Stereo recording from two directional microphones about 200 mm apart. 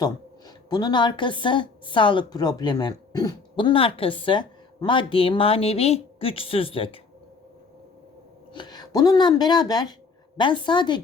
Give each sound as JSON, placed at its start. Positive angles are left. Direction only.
{"t": 0.0, "sound": "a woman's voice", "side_deg": 20}
{"t": 8.5, "sound": "a woman's voice", "side_deg": 20}